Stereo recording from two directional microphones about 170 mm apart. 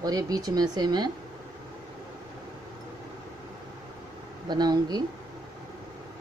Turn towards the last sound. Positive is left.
turn(degrees=-25)  # may be behind; listen again after turning